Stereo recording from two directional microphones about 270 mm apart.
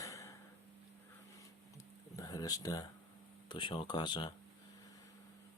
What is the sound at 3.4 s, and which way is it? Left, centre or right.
Speech, centre.